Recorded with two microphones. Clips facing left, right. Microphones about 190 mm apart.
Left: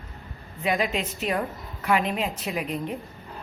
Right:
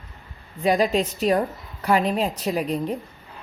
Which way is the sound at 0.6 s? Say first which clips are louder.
Right 6 dB; 35° right (ahead or behind).